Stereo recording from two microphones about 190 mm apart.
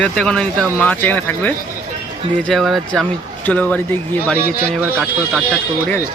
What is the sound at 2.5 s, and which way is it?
Speech, centre (ahead or behind).